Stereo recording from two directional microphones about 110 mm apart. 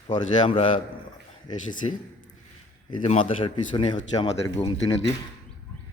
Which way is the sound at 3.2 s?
50° left (ahead or behind).